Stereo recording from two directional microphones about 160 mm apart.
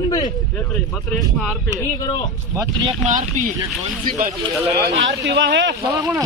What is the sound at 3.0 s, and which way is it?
Speech, 50° right (ahead or behind).